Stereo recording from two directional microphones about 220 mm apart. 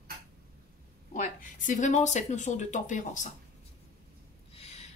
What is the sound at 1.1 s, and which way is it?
Speech, 35° left (ahead or behind).